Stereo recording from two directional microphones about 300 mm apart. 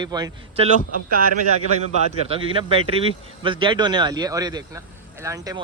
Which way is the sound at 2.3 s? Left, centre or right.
Centre.